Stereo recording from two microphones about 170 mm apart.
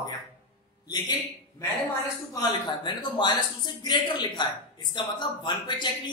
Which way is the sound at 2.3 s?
25° left (ahead or behind).